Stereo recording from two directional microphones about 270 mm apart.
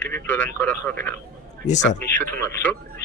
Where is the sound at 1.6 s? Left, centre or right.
Left.